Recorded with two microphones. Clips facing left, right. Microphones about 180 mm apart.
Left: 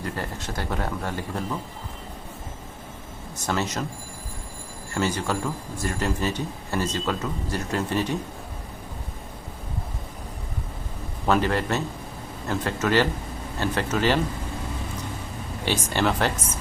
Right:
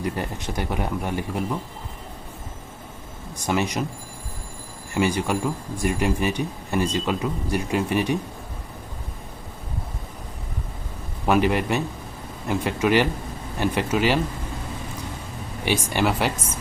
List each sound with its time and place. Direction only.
0.0 s a man's voice: 15° right (ahead or behind)
3.3 s a man's voice: 15° right (ahead or behind)
4.9 s a man's voice: 15° right (ahead or behind)
11.3 s a man's voice: 15° right (ahead or behind)
15.6 s a man's voice: 10° right (ahead or behind)